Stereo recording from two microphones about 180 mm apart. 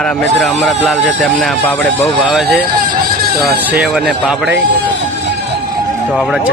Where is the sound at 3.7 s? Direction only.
5° right (ahead or behind).